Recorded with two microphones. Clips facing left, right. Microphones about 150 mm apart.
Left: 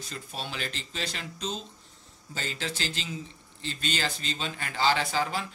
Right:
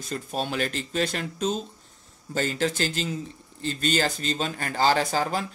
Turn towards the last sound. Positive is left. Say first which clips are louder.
# right 4 dB
turn(degrees=-45)  # may be behind; listen again after turning